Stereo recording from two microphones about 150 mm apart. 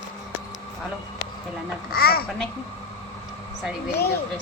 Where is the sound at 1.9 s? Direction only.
90° left.